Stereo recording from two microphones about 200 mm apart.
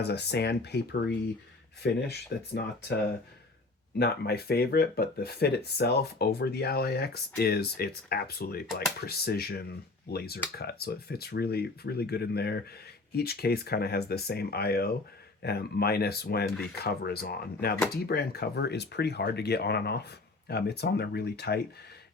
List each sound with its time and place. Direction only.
0.0 s speech: 55° left (ahead or behind)
3.9 s speech: 50° left (ahead or behind)